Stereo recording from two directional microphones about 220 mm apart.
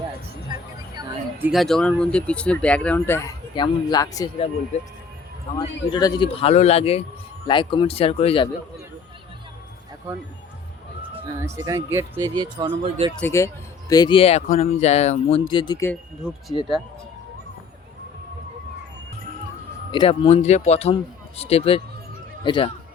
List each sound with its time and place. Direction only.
0.5 s vehicle: 20° right (ahead or behind)
0.9 s speech: 5° right (ahead or behind); by 4.3 s 15° left (ahead or behind)
5.5 s speech: 20° left (ahead or behind)
11.4 s speech: 15° right (ahead or behind)
13.1 s speech: 10° left (ahead or behind)
16.2 s speech: 5° right (ahead or behind)
19.9 s speech: 25° left (ahead or behind)